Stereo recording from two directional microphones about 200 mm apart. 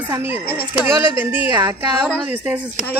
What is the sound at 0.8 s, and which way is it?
A woman's voice, 10° right (ahead or behind).